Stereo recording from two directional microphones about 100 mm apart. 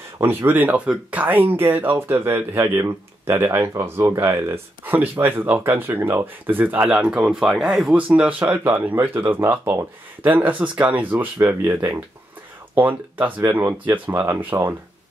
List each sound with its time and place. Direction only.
0.2 s speech: 20° right (ahead or behind); by 8.0 s 5° right (ahead or behind)
8.2 s speech: 15° right (ahead or behind)